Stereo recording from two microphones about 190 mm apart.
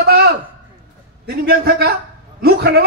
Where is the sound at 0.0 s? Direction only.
55° right (ahead or behind).